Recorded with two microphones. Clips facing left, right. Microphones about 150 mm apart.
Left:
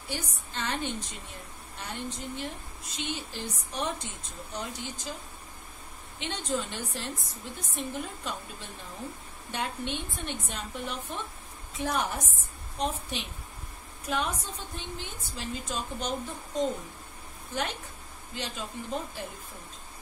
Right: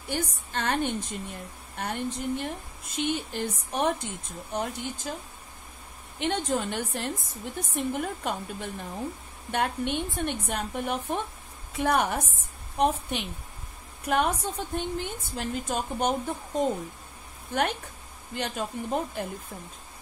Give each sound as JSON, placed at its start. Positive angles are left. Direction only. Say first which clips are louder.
{"t": 0.1, "sound": "a woman's voice", "louder": "right 6 dB", "side_deg": -55}
{"t": 6.1, "sound": "a woman's voice", "louder": "right 5 dB", "side_deg": -55}